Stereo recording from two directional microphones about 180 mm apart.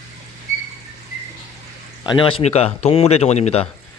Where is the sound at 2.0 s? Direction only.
25° left (ahead or behind).